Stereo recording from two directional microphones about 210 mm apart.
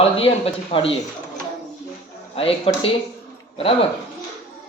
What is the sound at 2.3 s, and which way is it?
Speech, 25° left (ahead or behind).